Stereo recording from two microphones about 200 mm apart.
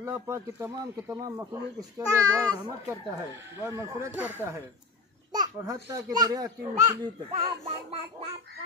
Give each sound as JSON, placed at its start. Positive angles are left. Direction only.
{"t": 0.0, "sound": "a child's voice", "side_deg": -15}